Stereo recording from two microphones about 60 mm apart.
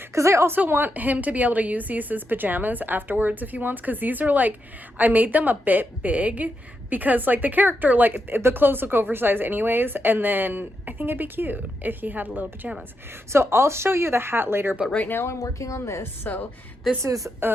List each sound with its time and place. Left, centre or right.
0.1 s a woman's voice: right
0.5 s a woman's voice: right
13.3 s speech: right
14.9 s speech: left
15.3 s speech: left
16.3 s speech: left
17.0 s speech: right